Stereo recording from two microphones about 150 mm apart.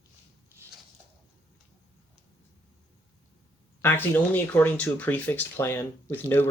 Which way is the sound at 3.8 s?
15° left (ahead or behind).